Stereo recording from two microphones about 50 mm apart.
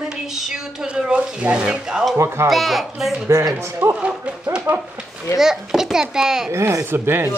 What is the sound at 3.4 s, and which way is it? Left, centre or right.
Speech, right.